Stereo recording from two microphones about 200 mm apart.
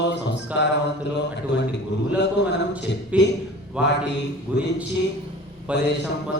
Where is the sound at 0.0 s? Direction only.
60° left (ahead or behind).